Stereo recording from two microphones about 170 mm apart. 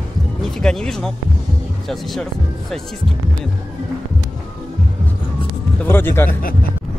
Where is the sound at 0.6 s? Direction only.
5° left (ahead or behind).